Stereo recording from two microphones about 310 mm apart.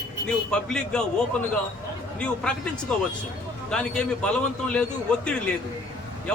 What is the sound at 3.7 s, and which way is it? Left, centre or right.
Speech, centre.